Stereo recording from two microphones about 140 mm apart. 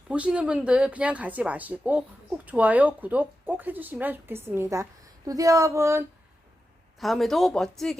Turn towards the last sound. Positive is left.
turn(degrees=0)  # may be behind; listen again after turning